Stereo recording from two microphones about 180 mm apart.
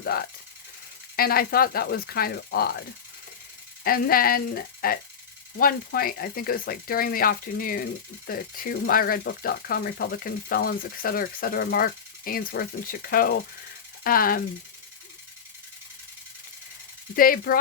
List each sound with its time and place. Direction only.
0.0 s speech: 60° left (ahead or behind)
3.8 s speech: 55° left (ahead or behind)
17.2 s speech: 55° left (ahead or behind)